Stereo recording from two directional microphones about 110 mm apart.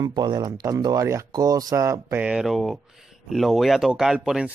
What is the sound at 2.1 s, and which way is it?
Speech, 5° right (ahead or behind).